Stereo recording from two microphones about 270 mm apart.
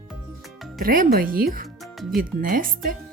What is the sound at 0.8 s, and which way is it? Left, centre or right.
Speech, right.